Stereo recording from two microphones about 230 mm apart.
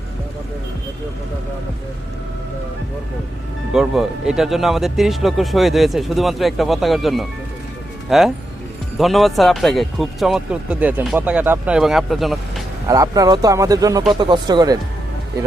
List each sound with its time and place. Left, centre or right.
3.7 s speech: centre
12.9 s speech: centre